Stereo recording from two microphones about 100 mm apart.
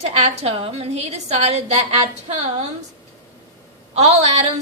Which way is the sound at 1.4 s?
90° right.